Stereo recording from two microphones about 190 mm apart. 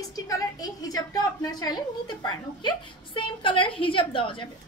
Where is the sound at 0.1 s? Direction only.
20° left (ahead or behind).